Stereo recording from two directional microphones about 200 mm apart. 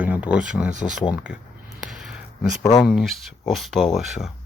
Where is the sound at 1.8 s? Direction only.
Centre (ahead or behind).